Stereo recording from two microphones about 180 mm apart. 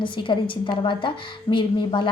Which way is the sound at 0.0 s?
25° left (ahead or behind).